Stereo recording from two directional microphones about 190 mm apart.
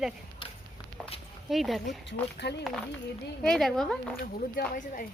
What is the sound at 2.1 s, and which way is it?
Speech, 65° left (ahead or behind).